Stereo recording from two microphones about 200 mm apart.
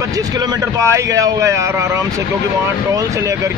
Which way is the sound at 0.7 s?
15° right (ahead or behind).